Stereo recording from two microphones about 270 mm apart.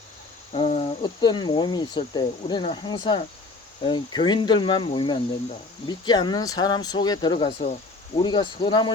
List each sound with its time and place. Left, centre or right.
0.5 s speech: left